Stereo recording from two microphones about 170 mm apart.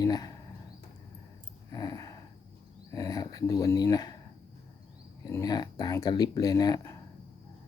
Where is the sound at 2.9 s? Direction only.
20° left (ahead or behind).